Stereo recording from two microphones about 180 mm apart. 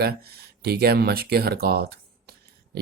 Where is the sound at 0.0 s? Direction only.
60° right (ahead or behind).